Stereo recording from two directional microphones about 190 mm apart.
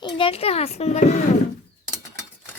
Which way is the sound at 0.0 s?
30° left (ahead or behind).